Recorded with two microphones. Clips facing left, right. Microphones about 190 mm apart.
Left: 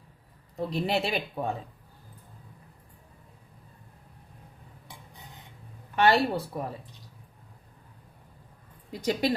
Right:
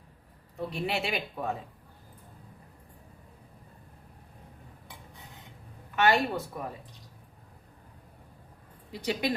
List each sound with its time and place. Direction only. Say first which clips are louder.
0.7 s speech: left 4 dB; 35° left (ahead or behind)
6.0 s speech: left 2 dB; 35° left (ahead or behind)
8.9 s a woman's voice: left 3 dB; 45° left (ahead or behind)